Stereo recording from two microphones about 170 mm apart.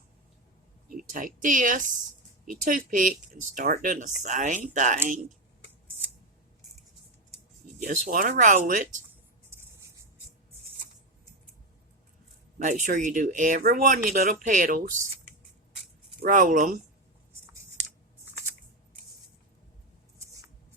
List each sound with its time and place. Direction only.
0.9 s speech: 50° right (ahead or behind)
7.8 s speech: 50° right (ahead or behind)
12.6 s speech: 45° right (ahead or behind)
16.3 s speech: 50° right (ahead or behind)
20.1 s a sound: 20° right (ahead or behind)